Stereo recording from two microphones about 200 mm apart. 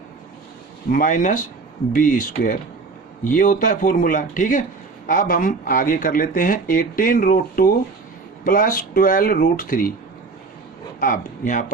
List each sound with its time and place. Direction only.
0.9 s speech: 40° left (ahead or behind)
11.0 s speech: 40° left (ahead or behind)